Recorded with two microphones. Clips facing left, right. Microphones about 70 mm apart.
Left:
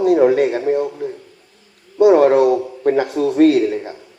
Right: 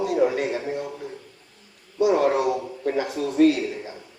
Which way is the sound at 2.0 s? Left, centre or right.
Left.